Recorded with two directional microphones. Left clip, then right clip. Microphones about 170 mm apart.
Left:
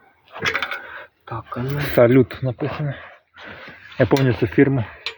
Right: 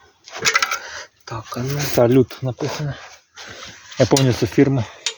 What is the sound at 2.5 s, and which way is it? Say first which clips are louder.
Speech: right 3 dB; 90° right.